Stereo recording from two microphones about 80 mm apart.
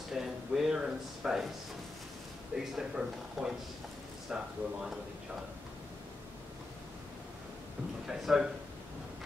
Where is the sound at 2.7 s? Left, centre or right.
Centre.